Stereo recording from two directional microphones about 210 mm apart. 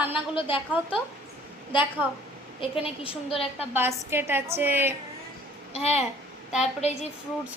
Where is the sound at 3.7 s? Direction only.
10° right (ahead or behind).